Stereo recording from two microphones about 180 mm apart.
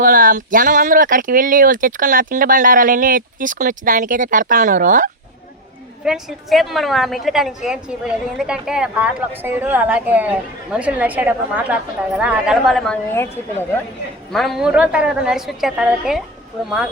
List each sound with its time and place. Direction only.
0.0 s speech: 50° right (ahead or behind)
6.1 s a woman's voice: centre (ahead or behind)
14.3 s a woman's voice: centre (ahead or behind)